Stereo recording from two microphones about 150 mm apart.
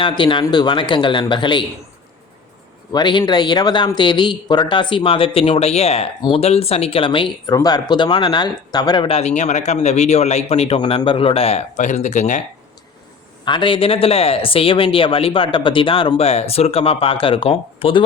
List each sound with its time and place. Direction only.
0.0 s speech: 35° left (ahead or behind)
2.9 s speech: 30° left (ahead or behind); by 12.4 s 50° left (ahead or behind)
13.4 s speech: 30° left (ahead or behind)